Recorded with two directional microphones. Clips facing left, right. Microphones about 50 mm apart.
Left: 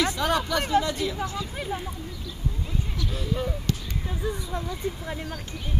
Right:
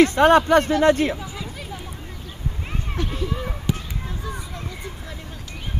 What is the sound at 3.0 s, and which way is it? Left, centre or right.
Speech, right.